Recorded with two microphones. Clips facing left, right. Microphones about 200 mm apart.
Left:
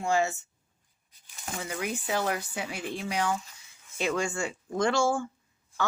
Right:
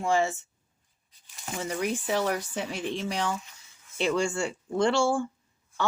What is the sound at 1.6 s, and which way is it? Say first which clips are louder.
Speech: right 4 dB; 35° right (ahead or behind).